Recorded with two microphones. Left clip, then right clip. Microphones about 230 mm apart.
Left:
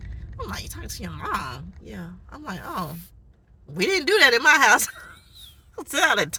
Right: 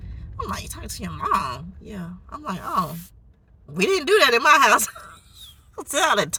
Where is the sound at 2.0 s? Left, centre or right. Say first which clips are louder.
Right 8 dB; centre.